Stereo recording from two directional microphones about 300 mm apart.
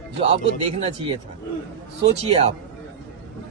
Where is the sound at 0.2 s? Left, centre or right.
Centre.